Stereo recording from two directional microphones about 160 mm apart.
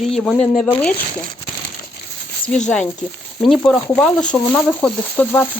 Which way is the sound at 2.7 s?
5° left (ahead or behind).